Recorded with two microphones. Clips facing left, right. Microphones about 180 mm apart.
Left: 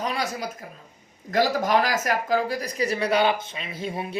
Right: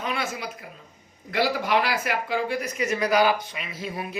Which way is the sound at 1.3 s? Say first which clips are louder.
Left 2 dB; 40° left (ahead or behind).